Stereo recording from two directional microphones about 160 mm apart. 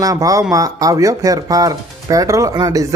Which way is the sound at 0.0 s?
20° right (ahead or behind).